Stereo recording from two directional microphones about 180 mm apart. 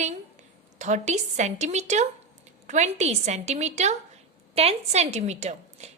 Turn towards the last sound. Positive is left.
turn(degrees=-40)  # may be behind; listen again after turning